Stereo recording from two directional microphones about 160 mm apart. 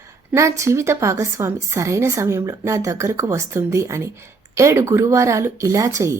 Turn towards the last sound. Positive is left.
turn(degrees=-20)  # may be behind; listen again after turning